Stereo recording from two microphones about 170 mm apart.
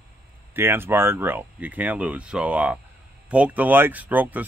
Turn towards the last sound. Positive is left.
turn(degrees=-10)  # may be behind; listen again after turning